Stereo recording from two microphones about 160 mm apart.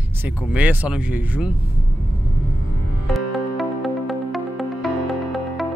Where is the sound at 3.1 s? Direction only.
Centre (ahead or behind).